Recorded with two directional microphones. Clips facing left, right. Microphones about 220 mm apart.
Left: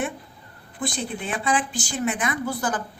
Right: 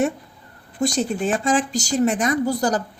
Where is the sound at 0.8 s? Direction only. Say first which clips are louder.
Right 8 dB; 45° right (ahead or behind).